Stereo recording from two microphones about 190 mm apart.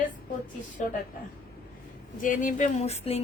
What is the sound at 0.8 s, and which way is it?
Speech, 40° left (ahead or behind).